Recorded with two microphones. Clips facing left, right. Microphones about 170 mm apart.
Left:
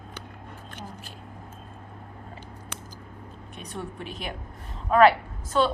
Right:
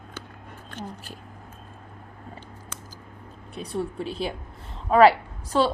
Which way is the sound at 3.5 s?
35° right (ahead or behind).